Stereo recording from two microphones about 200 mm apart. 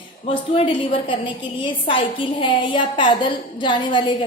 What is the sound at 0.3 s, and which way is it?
A woman's voice, 25° left (ahead or behind).